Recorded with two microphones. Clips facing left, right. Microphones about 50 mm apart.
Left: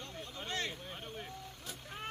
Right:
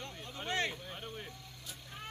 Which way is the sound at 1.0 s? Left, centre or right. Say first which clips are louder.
Right 1 dB; centre.